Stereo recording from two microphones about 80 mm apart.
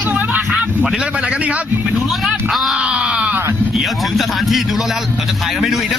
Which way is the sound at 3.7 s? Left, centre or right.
Centre.